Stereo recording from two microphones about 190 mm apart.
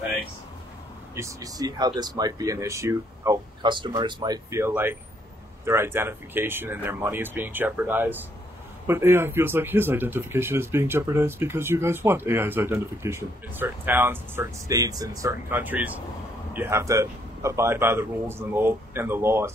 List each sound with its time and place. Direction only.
1.1 s speech: 15° right (ahead or behind)